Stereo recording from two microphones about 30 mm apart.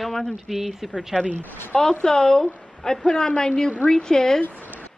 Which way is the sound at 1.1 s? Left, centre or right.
Left.